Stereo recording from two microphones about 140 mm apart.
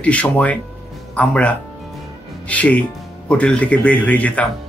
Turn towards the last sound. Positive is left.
turn(degrees=10)  # may be behind; listen again after turning